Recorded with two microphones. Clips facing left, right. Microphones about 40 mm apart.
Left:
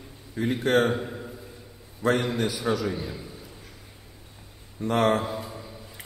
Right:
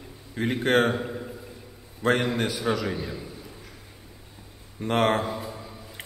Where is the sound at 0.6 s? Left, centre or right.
Right.